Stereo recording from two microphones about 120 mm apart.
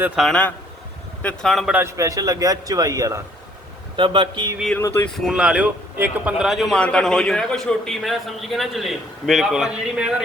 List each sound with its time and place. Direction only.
0.2 s a man's voice: 5° right (ahead or behind)
1.2 s speech: 10° left (ahead or behind)
1.5 s a man's voice: centre (ahead or behind)
1.7 s a man's voice: 25° right (ahead or behind)
3.9 s speech: 40° right (ahead or behind)
4.8 s speech: 20° left (ahead or behind)
5.0 s a man's voice: centre (ahead or behind)
6.7 s a man's voice: 10° left (ahead or behind); by 10.2 s 10° right (ahead or behind)